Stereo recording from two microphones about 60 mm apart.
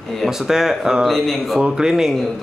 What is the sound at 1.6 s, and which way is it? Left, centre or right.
Speech, centre.